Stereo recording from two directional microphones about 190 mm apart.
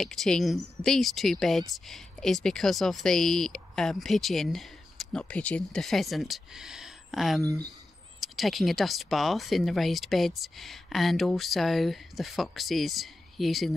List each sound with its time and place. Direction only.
0.0 s speech: centre (ahead or behind)
7.4 s speech: 20° right (ahead or behind)
8.2 s speech: centre (ahead or behind)